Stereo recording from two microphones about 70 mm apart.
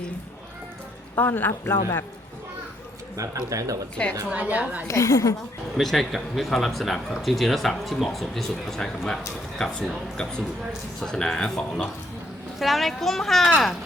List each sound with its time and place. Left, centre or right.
1.1 s a man's voice: left
3.2 s a man's voice: right
4.3 s a woman's voice: right
4.9 s a woman's voice: left
5.7 s speech: centre